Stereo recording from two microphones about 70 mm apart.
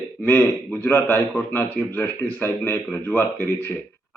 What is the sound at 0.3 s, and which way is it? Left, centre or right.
A man's voice, left.